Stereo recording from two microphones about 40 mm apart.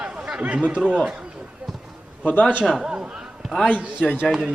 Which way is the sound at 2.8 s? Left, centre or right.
Centre.